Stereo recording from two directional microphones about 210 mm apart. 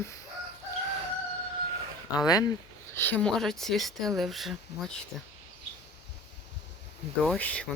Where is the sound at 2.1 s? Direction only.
20° left (ahead or behind); by 4.9 s centre (ahead or behind).